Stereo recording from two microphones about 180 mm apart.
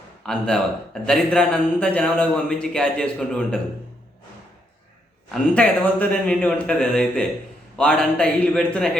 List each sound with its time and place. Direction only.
0.2 s a man's voice: 5° left (ahead or behind)
5.3 s a man's voice: 10° left (ahead or behind)